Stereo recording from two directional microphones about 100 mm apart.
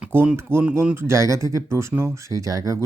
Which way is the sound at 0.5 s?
25° right (ahead or behind).